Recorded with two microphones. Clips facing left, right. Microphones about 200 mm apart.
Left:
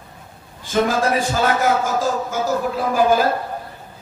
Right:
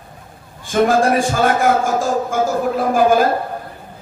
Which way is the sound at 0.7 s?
50° right (ahead or behind).